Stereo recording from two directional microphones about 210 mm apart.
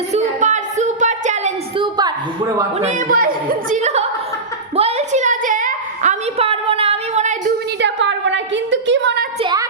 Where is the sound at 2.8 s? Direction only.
35° right (ahead or behind).